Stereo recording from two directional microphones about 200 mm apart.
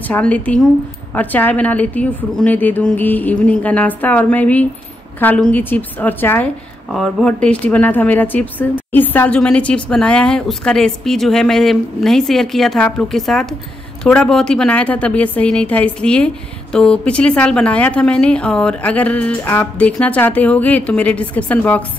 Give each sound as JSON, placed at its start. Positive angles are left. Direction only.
{"t": 0.1, "sound": "a woman's voice", "side_deg": 5}